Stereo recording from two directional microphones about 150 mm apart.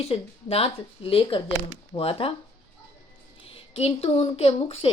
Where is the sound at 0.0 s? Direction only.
40° left (ahead or behind).